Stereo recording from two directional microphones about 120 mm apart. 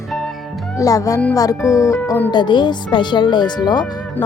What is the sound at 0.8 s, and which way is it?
Music, 30° left (ahead or behind).